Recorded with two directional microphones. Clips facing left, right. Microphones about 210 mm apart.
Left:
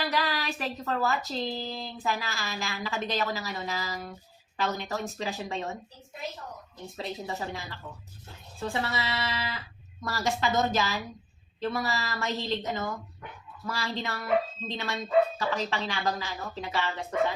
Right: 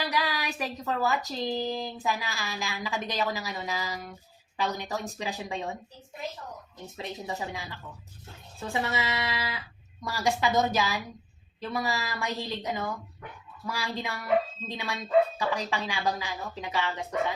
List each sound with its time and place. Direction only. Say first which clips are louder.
0.0 s a woman's voice: left 1 dB; 15° right (ahead or behind)
6.9 s a woman's voice: left 1 dB; 20° right (ahead or behind)
15.4 s a woman's voice: even; 15° right (ahead or behind)